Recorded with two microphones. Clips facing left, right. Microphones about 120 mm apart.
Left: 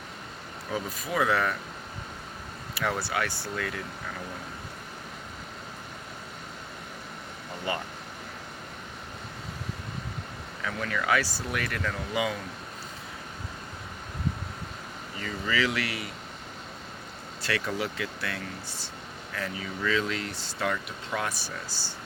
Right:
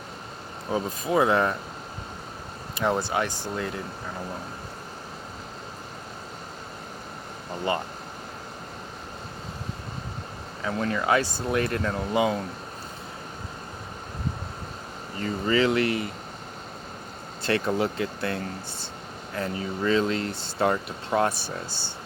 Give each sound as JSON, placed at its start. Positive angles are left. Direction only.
{"t": 0.7, "sound": "speech", "side_deg": -30}
{"t": 2.7, "sound": "speech", "side_deg": -30}
{"t": 7.7, "sound": "speech", "side_deg": -30}
{"t": 10.6, "sound": "speech", "side_deg": -30}
{"t": 15.2, "sound": "speech", "side_deg": -35}
{"t": 17.4, "sound": "speech", "side_deg": -30}